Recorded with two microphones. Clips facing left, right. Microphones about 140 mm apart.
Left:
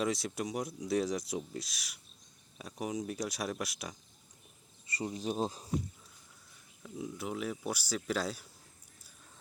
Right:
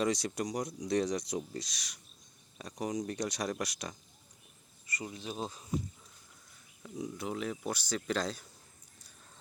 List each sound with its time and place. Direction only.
0.0 s speech: centre (ahead or behind)
4.9 s speech: 25° left (ahead or behind)
5.2 s speech: 40° left (ahead or behind)
6.8 s speech: 5° left (ahead or behind)